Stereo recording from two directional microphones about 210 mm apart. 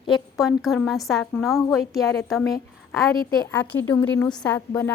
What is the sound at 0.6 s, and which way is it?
A woman's voice, centre (ahead or behind).